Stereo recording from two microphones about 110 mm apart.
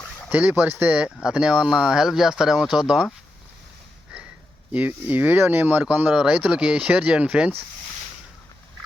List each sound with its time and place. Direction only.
0.3 s speech: 15° right (ahead or behind)
4.7 s speech: 15° right (ahead or behind)